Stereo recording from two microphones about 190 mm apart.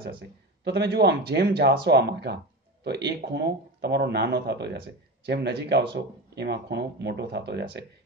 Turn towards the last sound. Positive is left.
turn(degrees=-60)  # may be behind; listen again after turning